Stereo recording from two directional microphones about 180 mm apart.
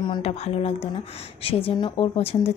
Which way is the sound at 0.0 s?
30° left (ahead or behind).